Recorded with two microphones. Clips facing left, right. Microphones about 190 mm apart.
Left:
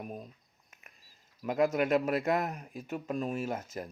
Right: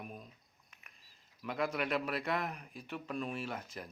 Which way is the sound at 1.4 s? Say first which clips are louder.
Left 8 dB; 45° left (ahead or behind).